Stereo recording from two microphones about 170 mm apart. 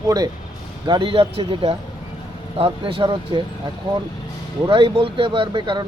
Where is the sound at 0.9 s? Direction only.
30° right (ahead or behind).